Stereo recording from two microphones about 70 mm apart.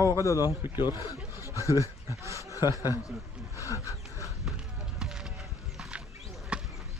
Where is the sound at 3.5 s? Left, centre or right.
Left.